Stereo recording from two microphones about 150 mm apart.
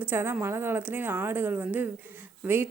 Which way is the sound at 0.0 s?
15° right (ahead or behind).